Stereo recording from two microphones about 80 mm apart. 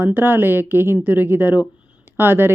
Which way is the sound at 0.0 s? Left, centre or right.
Right.